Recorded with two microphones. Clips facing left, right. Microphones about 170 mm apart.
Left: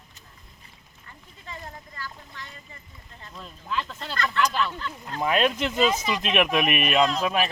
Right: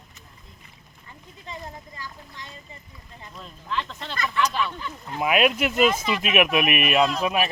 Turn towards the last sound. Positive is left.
turn(degrees=-5)  # may be behind; listen again after turning